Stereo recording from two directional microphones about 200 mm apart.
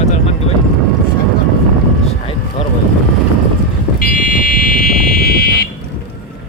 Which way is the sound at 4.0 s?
45° left (ahead or behind).